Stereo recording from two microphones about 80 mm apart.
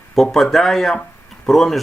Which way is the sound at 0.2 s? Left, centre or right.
Centre.